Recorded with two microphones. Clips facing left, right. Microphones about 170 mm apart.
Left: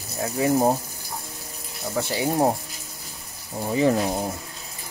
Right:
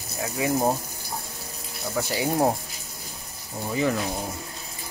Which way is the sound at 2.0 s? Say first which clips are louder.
Left 1 dB; 25° left (ahead or behind).